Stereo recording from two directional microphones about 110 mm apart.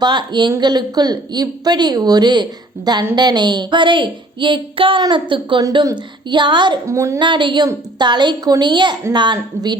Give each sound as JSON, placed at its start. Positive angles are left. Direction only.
{"t": 0.0, "sound": "speech", "side_deg": -45}
{"t": 6.8, "sound": "a woman's voice", "side_deg": -25}
{"t": 7.2, "sound": "speech", "side_deg": -45}